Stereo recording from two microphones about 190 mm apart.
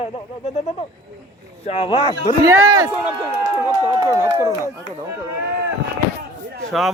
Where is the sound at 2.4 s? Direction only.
15° right (ahead or behind).